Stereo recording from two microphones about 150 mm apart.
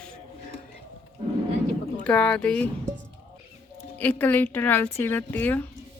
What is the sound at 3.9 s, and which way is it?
A woman's voice, 10° left (ahead or behind).